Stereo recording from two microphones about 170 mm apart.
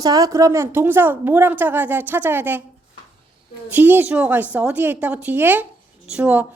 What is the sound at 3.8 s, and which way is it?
Speech, 10° right (ahead or behind).